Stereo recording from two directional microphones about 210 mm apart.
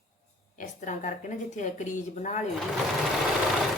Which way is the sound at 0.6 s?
35° left (ahead or behind).